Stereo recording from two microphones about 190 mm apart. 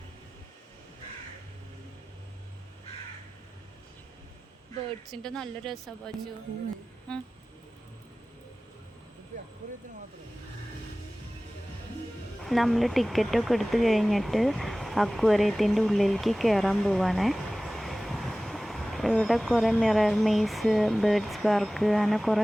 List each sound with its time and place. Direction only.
5.0 s a woman's voice: 5° left (ahead or behind)
12.5 s speech: centre (ahead or behind)